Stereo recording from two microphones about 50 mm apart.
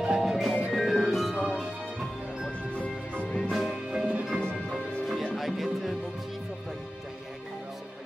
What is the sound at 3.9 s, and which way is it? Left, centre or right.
Music, right.